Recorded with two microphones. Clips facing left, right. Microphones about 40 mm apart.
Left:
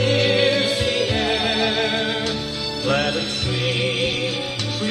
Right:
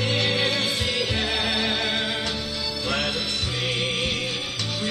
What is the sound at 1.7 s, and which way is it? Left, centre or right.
Music, centre.